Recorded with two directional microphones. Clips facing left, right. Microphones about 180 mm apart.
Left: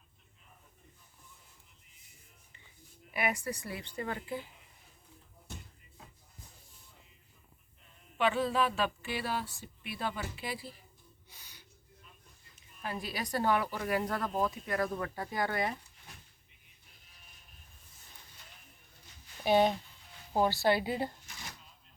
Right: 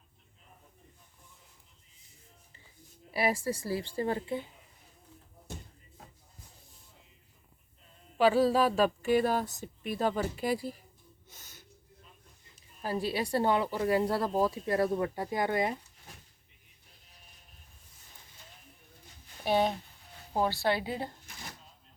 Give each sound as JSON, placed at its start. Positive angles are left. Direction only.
{"t": 3.1, "sound": "speech", "side_deg": -30}
{"t": 8.2, "sound": "speech", "side_deg": -35}
{"t": 11.3, "sound": "a sound", "side_deg": -45}
{"t": 12.8, "sound": "speech", "side_deg": -35}
{"t": 19.5, "sound": "a woman's voice", "side_deg": 0}